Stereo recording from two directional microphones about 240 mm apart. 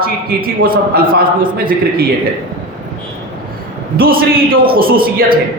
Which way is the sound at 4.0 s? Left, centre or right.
Right.